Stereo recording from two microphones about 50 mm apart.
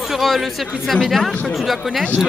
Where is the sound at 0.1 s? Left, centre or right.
Centre.